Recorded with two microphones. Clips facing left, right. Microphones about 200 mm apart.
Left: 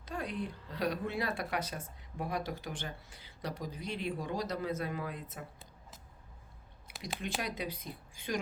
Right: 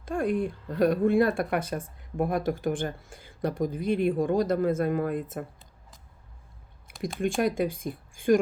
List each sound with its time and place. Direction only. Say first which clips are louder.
0.0 s speech: right 11 dB; 50° right (ahead or behind)
7.2 s speech: right 13 dB; 50° right (ahead or behind)